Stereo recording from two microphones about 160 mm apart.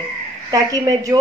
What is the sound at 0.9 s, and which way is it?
Speech, 20° right (ahead or behind).